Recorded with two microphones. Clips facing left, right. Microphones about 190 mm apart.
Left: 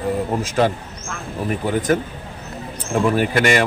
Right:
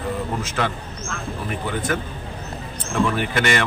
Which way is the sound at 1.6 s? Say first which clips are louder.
Left 6 dB; 40° left (ahead or behind).